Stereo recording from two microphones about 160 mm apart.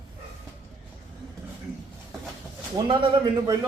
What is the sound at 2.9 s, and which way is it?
Speech, 30° right (ahead or behind).